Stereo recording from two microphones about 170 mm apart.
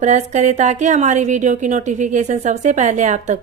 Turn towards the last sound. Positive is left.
turn(degrees=-45)  # may be behind; listen again after turning